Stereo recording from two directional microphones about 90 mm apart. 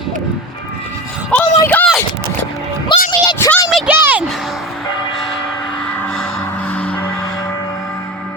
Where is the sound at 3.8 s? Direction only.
15° right (ahead or behind).